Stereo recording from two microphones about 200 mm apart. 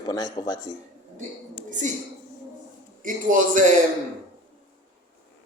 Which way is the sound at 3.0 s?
40° right (ahead or behind).